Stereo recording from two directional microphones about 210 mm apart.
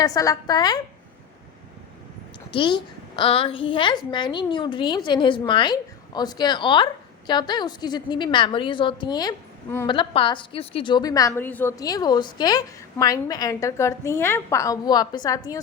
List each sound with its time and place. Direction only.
0.0 s a child's voice: 15° left (ahead or behind)
2.5 s a child's voice: 25° left (ahead or behind)